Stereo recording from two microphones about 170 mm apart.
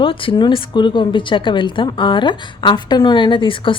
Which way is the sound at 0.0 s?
30° left (ahead or behind).